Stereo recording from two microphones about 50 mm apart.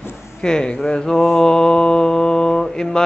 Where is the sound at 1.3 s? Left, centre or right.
Centre.